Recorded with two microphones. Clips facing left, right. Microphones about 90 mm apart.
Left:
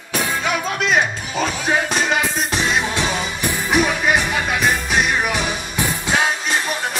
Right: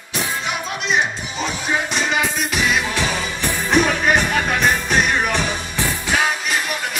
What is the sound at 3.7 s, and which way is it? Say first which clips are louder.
Music: right 1 dB; 5° left (ahead or behind).